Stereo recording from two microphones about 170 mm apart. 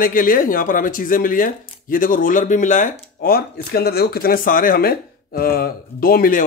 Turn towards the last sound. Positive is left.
turn(degrees=55)  # may be behind; listen again after turning